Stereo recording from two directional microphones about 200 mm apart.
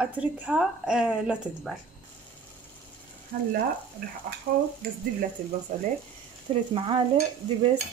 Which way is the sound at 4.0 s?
50° right (ahead or behind).